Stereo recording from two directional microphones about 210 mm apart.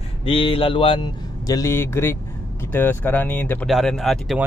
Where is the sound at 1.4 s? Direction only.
15° left (ahead or behind).